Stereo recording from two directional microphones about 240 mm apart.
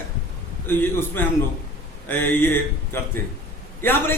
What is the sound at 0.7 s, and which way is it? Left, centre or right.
A man's voice, centre.